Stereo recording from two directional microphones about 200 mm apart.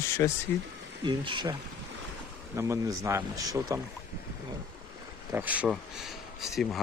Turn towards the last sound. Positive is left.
turn(degrees=0)  # may be behind; listen again after turning